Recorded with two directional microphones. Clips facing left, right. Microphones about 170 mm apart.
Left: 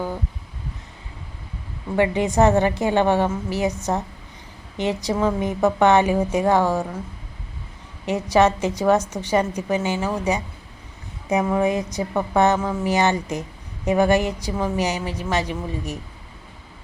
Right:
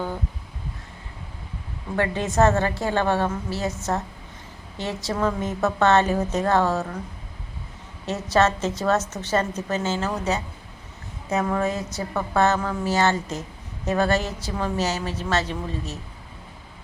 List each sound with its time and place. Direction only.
2.0 s a woman's voice: 15° left (ahead or behind)
8.0 s a woman's voice: 15° left (ahead or behind)